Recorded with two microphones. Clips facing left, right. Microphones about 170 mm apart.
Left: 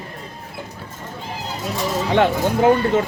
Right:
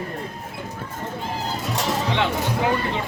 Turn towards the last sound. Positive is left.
turn(degrees=45)  # may be behind; listen again after turning